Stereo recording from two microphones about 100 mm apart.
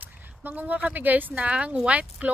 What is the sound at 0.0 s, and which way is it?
Speech, 20° right (ahead or behind).